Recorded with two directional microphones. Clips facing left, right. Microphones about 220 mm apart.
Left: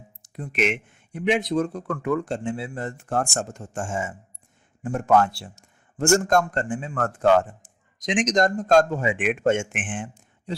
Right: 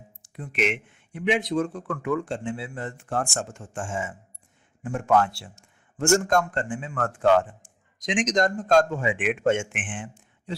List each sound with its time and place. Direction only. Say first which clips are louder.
0.2 s a man's voice: left 2 dB; 40° left (ahead or behind)